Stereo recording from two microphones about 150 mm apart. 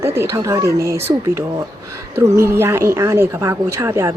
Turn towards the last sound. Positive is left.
turn(degrees=-15)  # may be behind; listen again after turning